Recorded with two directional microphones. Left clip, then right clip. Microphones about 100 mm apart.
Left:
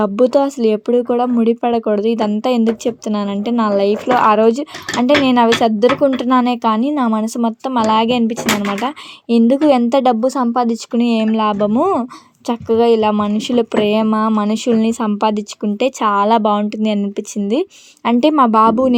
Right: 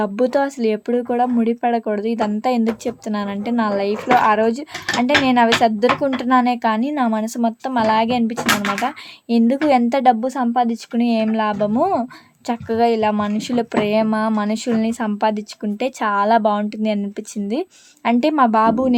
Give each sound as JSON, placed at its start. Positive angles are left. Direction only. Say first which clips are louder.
{"t": 0.0, "sound": "speech", "louder": "left 5 dB", "side_deg": 20}